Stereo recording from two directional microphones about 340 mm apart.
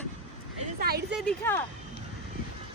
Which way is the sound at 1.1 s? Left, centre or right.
Centre.